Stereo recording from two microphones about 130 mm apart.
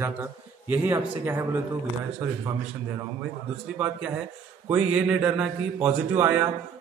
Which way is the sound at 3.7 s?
10° right (ahead or behind).